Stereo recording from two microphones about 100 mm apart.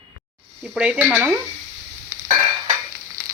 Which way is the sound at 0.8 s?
10° right (ahead or behind).